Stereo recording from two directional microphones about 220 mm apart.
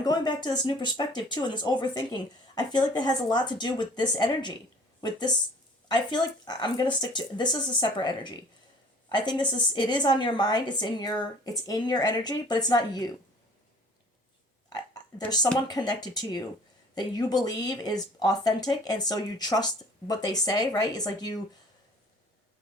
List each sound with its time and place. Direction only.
0.0 s a woman's voice: 20° left (ahead or behind)
15.6 s a woman's voice: 20° left (ahead or behind)